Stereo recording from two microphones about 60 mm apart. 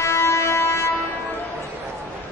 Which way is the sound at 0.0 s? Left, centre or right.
Left.